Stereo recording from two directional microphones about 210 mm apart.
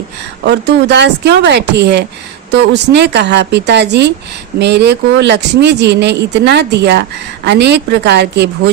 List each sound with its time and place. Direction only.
0.4 s speech: 55° right (ahead or behind)